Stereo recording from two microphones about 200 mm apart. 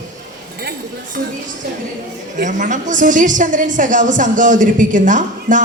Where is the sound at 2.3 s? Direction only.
40° right (ahead or behind).